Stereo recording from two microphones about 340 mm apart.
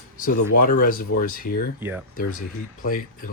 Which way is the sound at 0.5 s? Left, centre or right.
Left.